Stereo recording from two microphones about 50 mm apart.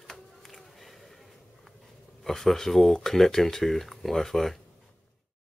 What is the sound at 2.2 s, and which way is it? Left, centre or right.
Speech, centre.